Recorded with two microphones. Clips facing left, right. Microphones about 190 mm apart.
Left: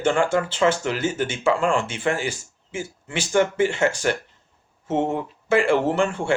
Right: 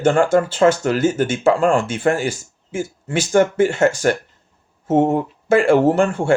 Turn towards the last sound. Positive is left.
turn(degrees=-45)  # may be behind; listen again after turning